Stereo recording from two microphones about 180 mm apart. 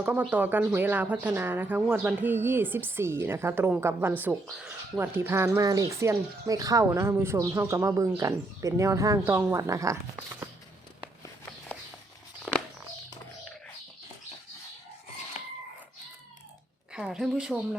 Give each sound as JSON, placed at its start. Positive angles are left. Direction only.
{"t": 0.0, "sound": "speech", "side_deg": -10}
{"t": 15.3, "sound": "a sound", "side_deg": 40}
{"t": 16.9, "sound": "a woman's voice", "side_deg": -5}